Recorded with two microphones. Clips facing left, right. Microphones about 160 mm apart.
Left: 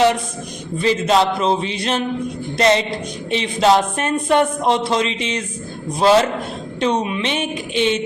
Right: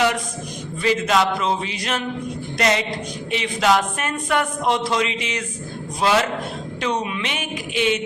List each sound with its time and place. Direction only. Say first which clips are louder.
0.8 s speech: left 3 dB; 30° left (ahead or behind)